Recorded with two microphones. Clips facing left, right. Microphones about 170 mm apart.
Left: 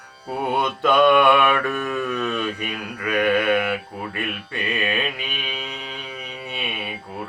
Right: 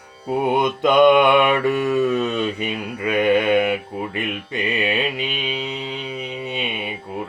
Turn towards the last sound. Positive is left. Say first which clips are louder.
# right 3 dB
turn(degrees=-20)  # may be behind; listen again after turning